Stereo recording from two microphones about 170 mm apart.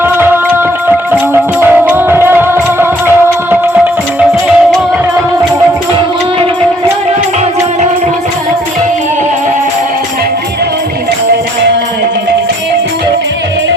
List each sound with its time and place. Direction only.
0.9 s music: 10° right (ahead or behind)